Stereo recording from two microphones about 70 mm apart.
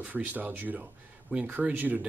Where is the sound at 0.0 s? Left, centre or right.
Right.